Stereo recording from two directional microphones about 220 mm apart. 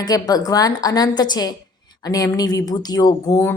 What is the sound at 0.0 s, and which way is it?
A woman's voice, 20° left (ahead or behind).